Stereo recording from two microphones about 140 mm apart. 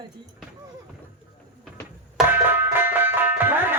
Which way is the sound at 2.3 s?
15° right (ahead or behind).